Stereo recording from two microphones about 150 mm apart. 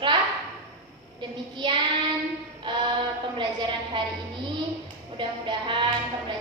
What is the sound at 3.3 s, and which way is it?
Speech, 30° right (ahead or behind).